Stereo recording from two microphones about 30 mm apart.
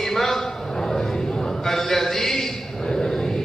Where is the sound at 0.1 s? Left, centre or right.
Centre.